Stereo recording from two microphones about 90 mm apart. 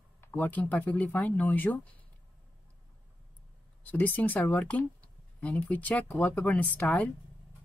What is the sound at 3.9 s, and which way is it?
Speech, 20° left (ahead or behind).